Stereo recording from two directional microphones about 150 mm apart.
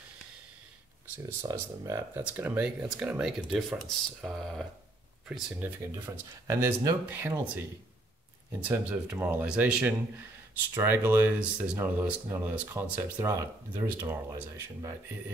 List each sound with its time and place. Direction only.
1.1 s speech: 20° right (ahead or behind); by 4.6 s centre (ahead or behind)
5.6 s speech: 15° right (ahead or behind)
8.5 s speech: 10° right (ahead or behind)